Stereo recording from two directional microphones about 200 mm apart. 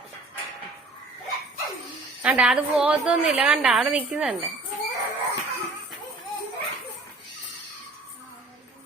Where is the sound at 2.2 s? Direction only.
5° right (ahead or behind).